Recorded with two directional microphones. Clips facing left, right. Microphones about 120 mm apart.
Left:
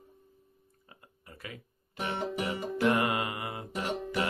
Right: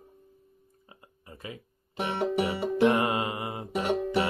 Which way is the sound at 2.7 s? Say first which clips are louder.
Right 4 dB; 20° right (ahead or behind).